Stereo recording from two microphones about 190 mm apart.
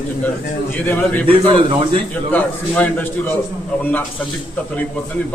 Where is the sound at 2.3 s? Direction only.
10° left (ahead or behind).